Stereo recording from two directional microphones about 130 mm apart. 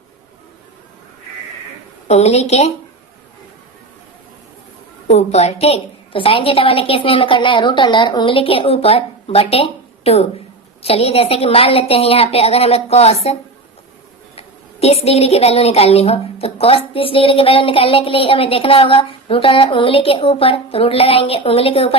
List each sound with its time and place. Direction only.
2.0 s a woman's voice: 55° left (ahead or behind)
5.0 s a woman's voice: 55° left (ahead or behind)
14.3 s a woman's voice: 50° left (ahead or behind)